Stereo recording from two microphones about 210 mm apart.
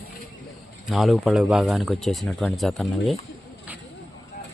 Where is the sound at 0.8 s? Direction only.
Centre (ahead or behind).